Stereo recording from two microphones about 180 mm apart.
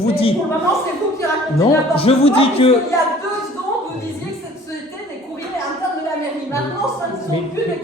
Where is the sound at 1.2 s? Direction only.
15° left (ahead or behind).